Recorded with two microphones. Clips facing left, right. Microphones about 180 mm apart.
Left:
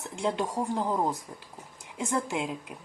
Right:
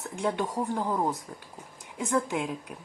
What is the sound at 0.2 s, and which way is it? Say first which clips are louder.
Speech: even; 15° left (ahead or behind).